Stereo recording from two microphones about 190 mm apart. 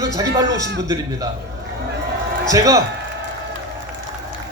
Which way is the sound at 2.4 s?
20° right (ahead or behind).